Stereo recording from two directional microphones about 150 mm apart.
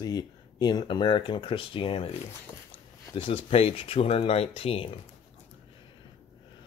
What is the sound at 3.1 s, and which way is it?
Speech, 40° left (ahead or behind).